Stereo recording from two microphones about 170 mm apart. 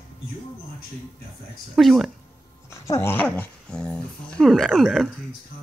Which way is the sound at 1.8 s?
Centre (ahead or behind).